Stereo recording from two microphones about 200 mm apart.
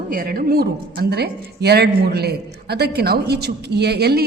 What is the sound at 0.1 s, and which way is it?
A woman's voice, 45° right (ahead or behind).